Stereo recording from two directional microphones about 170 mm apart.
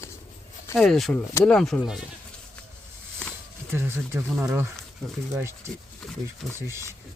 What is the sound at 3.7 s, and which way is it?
Speech, 15° right (ahead or behind).